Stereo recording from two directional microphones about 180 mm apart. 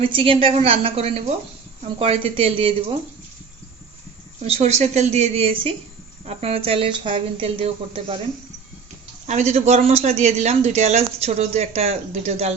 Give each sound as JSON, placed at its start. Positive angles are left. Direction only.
{"t": 0.0, "sound": "speech", "side_deg": -30}
{"t": 4.4, "sound": "speech", "side_deg": -35}
{"t": 9.2, "sound": "speech", "side_deg": -40}